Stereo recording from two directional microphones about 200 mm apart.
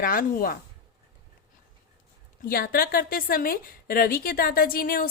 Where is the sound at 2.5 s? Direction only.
45° left (ahead or behind).